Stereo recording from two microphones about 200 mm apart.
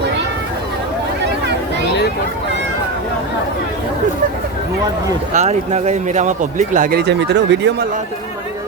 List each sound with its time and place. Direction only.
5.3 s speech: 35° right (ahead or behind)
7.0 s speech: 60° right (ahead or behind)